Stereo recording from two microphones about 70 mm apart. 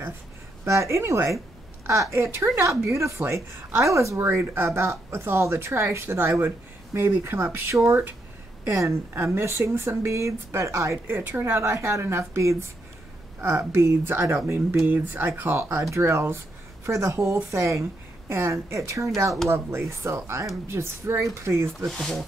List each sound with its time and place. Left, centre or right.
0.7 s a woman's voice: right
11.1 s speech: right
15.8 s speech: right
21.6 s speech: centre